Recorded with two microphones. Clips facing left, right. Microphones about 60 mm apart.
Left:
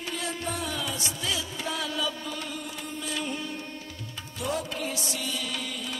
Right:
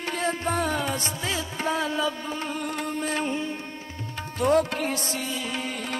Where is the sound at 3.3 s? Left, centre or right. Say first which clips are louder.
Right 5 dB; right.